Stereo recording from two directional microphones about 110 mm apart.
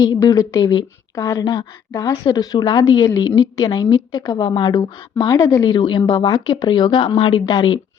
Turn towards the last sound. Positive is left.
turn(degrees=45)  # may be behind; listen again after turning